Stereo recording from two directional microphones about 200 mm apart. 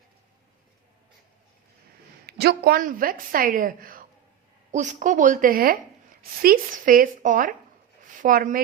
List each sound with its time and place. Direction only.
2.2 s a woman's voice: 55° right (ahead or behind)